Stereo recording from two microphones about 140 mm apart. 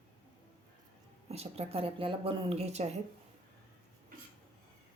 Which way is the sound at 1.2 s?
50° right (ahead or behind).